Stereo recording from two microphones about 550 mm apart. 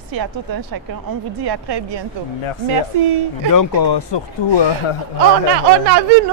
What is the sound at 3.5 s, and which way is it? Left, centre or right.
Speech, left.